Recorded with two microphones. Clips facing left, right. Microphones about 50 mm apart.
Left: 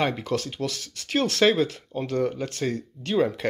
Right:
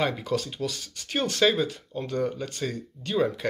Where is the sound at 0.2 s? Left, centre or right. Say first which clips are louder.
Left 1 dB; left.